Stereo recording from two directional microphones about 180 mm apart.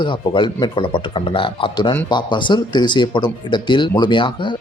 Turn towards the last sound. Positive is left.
turn(degrees=25)  # may be behind; listen again after turning